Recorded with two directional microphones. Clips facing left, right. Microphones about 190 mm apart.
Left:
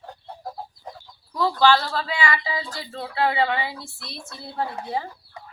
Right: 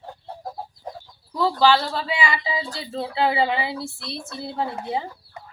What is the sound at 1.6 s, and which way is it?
Speech, 15° right (ahead or behind).